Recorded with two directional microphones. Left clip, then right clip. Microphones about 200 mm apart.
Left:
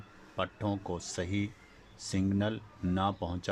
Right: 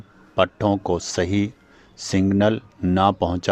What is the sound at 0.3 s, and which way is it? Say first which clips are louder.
Speech: right 15 dB; 45° right (ahead or behind).